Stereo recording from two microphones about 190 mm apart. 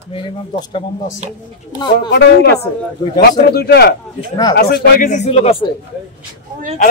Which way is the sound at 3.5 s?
55° left (ahead or behind).